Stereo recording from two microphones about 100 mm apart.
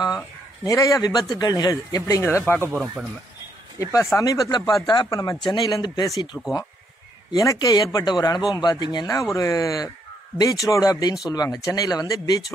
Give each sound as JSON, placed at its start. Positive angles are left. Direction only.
{"t": 0.7, "sound": "speech", "side_deg": 35}
{"t": 2.2, "sound": "speech", "side_deg": 20}
{"t": 3.8, "sound": "speech", "side_deg": 30}
{"t": 9.0, "sound": "speech", "side_deg": 30}